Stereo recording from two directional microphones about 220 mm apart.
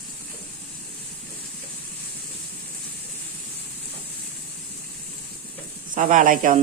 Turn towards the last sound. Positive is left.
turn(degrees=-35)  # may be behind; listen again after turning